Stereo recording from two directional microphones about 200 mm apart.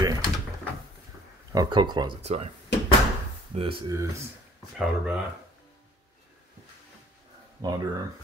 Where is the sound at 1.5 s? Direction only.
20° right (ahead or behind).